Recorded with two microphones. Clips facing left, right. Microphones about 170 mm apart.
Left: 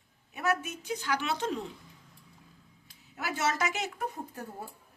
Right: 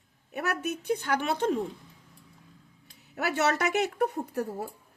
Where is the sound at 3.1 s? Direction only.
70° right (ahead or behind).